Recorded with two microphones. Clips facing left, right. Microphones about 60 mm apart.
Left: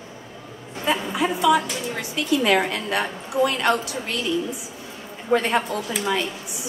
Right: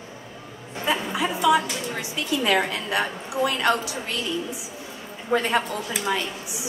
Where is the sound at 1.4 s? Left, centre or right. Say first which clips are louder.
Even; left.